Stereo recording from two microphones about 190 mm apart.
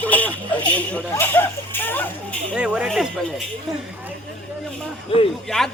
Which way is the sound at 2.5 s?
5° right (ahead or behind).